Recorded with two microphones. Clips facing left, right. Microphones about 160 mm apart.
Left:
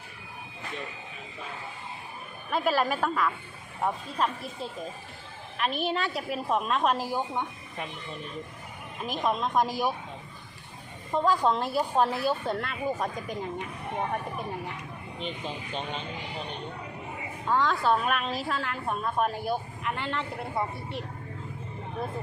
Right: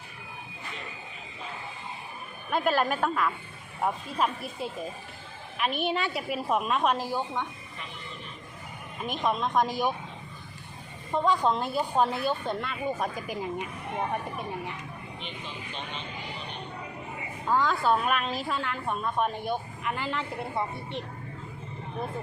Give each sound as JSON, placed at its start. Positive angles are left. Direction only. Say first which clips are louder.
{"t": 2.5, "sound": "a woman's voice", "louder": "even", "side_deg": 0}
{"t": 6.9, "sound": "speech", "louder": "even", "side_deg": 10}
{"t": 9.0, "sound": "a woman's voice", "louder": "even", "side_deg": 0}
{"t": 11.1, "sound": "a woman's voice", "louder": "left 1 dB", "side_deg": 0}
{"t": 15.2, "sound": "speech", "louder": "left 8 dB", "side_deg": 40}
{"t": 17.4, "sound": "a woman's voice", "louder": "even", "side_deg": -5}